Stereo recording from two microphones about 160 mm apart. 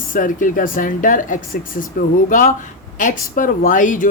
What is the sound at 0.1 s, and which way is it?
A woman's voice, 55° left (ahead or behind).